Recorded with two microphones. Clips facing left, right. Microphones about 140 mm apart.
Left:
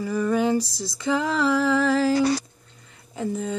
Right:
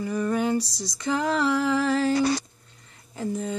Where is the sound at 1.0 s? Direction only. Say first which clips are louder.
Left 1 dB; centre (ahead or behind).